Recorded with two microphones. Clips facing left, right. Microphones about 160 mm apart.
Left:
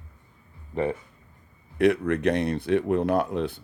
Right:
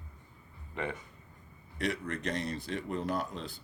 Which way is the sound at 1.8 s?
60° left (ahead or behind).